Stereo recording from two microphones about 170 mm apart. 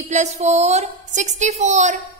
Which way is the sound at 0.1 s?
40° right (ahead or behind).